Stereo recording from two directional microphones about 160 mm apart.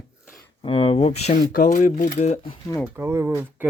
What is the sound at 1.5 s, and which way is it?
Speech, 55° left (ahead or behind).